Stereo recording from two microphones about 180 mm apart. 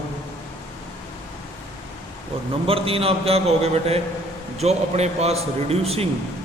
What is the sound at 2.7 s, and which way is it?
A man's voice, 30° right (ahead or behind).